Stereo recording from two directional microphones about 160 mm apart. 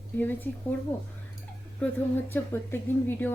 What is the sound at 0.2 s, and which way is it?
Speech, 10° left (ahead or behind).